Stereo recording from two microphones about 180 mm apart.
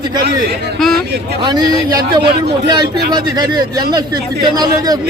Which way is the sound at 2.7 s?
20° right (ahead or behind).